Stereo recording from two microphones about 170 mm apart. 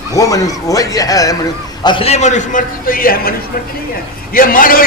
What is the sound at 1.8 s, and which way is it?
A man's voice, 30° left (ahead or behind).